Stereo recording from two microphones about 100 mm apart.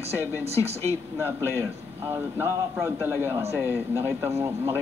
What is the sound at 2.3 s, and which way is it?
A man's voice, 25° right (ahead or behind).